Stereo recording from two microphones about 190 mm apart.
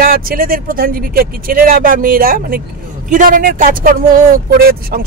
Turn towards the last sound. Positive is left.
turn(degrees=-50)  # may be behind; listen again after turning